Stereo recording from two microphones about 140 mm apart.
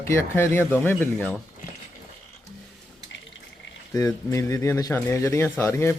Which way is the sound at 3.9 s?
25° left (ahead or behind).